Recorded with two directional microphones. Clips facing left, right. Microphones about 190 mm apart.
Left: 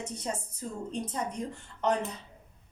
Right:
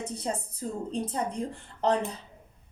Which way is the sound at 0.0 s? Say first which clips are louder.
Right 3 dB; 35° right (ahead or behind).